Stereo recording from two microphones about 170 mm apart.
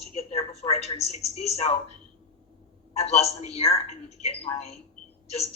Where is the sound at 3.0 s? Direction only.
40° left (ahead or behind).